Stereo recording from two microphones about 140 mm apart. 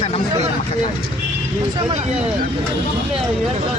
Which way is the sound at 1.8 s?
45° right (ahead or behind).